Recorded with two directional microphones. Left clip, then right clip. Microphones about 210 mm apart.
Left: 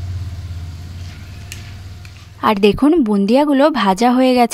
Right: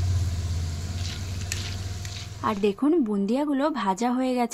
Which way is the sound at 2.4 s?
50° left (ahead or behind).